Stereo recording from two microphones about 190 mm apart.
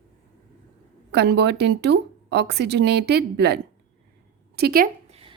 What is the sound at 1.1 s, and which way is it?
A woman's voice, 60° right (ahead or behind).